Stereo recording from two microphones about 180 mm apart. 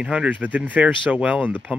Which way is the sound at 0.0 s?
5° right (ahead or behind).